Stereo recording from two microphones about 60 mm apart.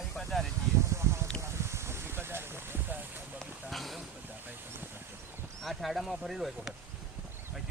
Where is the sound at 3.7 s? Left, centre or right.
Centre.